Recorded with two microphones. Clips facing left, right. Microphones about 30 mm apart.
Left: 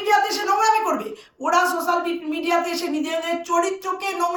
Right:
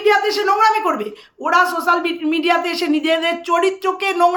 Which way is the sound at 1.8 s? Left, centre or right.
Right.